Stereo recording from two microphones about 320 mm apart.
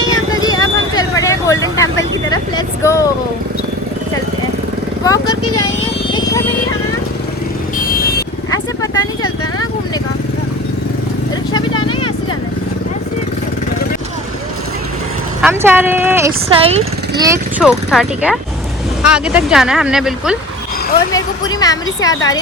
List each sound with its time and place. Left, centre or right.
0.1 s vehicle: centre
5.0 s vehicle: centre
6.1 s a sound: centre
7.9 s vehicle: left
8.4 s vehicle: centre
11.5 s a sound: centre
15.4 s speech: centre
21.1 s a woman's voice: centre